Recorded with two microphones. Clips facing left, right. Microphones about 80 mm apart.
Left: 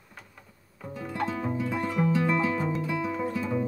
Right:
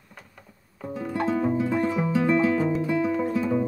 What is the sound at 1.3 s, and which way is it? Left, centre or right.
Music, centre.